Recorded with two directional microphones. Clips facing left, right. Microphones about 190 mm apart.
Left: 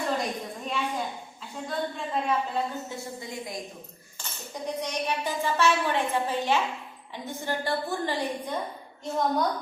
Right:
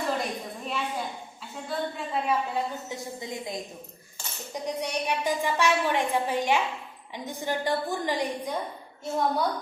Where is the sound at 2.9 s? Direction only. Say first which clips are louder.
Right 1 dB; 20° right (ahead or behind).